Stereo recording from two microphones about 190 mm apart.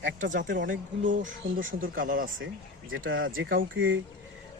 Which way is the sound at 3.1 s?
90° right.